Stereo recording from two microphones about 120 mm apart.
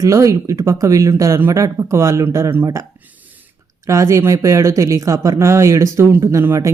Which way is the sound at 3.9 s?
25° right (ahead or behind).